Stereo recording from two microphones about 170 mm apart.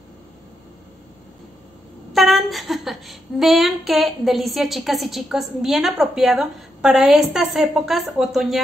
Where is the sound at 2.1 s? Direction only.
Centre (ahead or behind).